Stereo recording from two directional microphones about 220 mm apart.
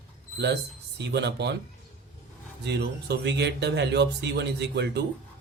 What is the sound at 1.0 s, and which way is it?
Speech, 50° right (ahead or behind).